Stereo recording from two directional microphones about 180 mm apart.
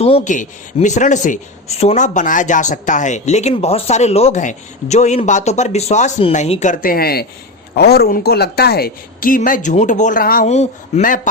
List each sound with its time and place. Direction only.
0.0 s a woman's voice: 35° left (ahead or behind); by 10.5 s 50° left (ahead or behind)
10.5 s speech: 40° left (ahead or behind)